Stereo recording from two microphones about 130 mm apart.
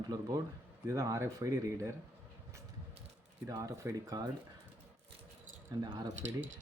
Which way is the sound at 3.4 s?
25° right (ahead or behind).